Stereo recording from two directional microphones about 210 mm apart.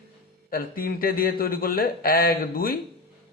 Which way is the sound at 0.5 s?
45° left (ahead or behind).